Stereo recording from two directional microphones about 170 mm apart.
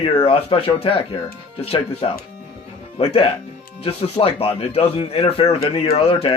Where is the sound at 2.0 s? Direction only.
35° left (ahead or behind).